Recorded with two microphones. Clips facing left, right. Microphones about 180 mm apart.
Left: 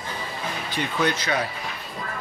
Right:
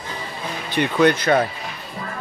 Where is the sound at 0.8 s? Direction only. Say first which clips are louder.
Right 8 dB; 60° right (ahead or behind).